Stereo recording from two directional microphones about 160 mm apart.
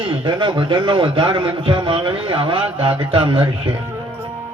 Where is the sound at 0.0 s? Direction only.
30° right (ahead or behind).